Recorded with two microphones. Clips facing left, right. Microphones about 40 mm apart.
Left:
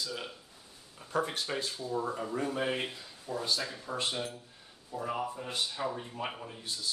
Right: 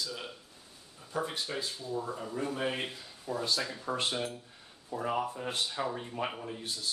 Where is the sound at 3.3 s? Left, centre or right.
Right.